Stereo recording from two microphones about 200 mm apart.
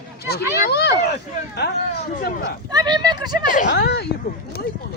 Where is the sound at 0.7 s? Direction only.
55° left (ahead or behind).